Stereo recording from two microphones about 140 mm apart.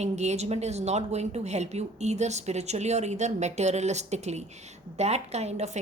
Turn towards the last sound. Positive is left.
turn(degrees=-55)  # may be behind; listen again after turning